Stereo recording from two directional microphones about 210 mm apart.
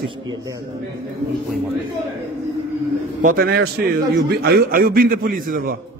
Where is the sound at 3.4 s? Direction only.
50° right (ahead or behind).